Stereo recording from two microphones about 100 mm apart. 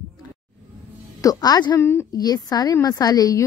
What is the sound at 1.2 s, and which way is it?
Speech, 40° left (ahead or behind).